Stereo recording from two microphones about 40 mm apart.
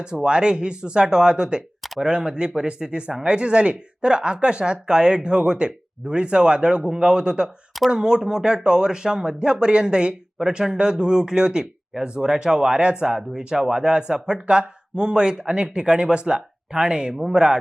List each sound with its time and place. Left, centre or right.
0.0 s speech: right